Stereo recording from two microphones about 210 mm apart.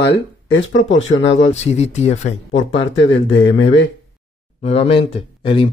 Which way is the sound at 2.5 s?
60° left (ahead or behind).